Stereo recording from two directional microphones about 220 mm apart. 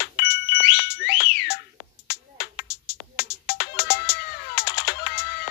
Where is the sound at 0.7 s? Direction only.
45° left (ahead or behind).